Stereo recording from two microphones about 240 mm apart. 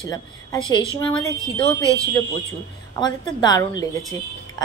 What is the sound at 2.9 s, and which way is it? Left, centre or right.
Speech, centre.